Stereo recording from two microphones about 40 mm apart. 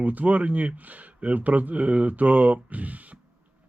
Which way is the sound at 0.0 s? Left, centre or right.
Right.